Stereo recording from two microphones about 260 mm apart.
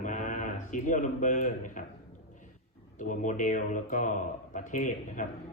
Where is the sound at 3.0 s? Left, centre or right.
Left.